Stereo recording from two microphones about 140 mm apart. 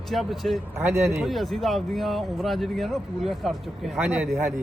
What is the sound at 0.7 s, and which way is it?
Speech, 20° right (ahead or behind).